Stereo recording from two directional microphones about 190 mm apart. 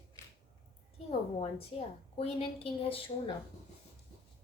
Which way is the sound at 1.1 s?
30° left (ahead or behind).